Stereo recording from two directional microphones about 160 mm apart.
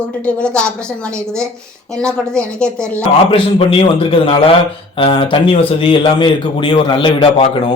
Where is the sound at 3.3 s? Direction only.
35° left (ahead or behind).